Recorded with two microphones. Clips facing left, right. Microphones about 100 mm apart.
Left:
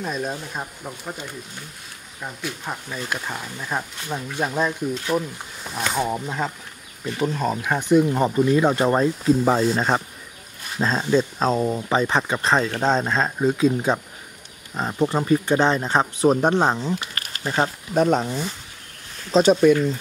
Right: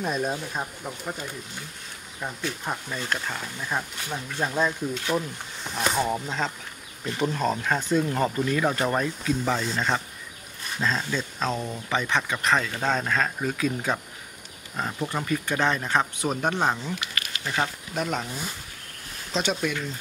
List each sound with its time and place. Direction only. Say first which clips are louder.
0.0 s speech: even; centre (ahead or behind); by 19.8 s 40° left (ahead or behind)